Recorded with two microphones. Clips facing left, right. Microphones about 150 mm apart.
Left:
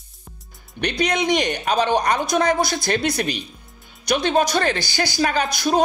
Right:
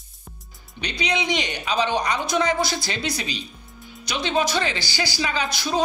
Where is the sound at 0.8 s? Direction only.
50° left (ahead or behind).